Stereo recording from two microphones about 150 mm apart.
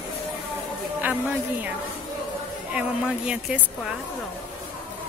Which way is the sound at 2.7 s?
5° right (ahead or behind).